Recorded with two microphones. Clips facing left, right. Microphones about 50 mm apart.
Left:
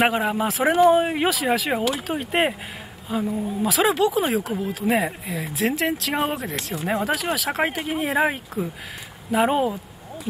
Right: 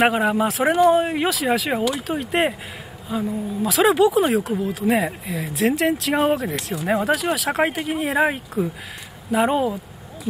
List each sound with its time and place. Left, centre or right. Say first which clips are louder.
0.0 s speech: right 3 dB; centre